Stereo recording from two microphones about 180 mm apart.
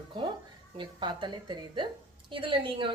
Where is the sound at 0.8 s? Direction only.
25° right (ahead or behind).